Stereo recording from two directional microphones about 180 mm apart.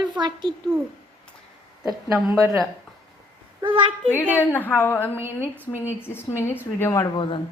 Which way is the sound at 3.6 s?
25° right (ahead or behind).